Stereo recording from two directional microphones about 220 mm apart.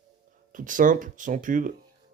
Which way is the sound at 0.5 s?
35° right (ahead or behind).